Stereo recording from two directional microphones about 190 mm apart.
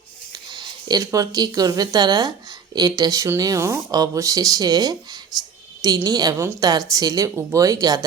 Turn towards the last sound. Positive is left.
turn(degrees=-20)  # may be behind; listen again after turning